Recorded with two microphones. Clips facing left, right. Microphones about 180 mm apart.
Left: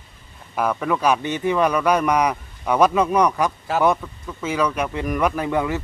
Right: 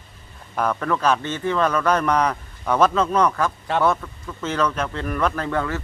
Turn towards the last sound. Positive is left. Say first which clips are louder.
# left 2 dB
turn(degrees=15)  # may be behind; listen again after turning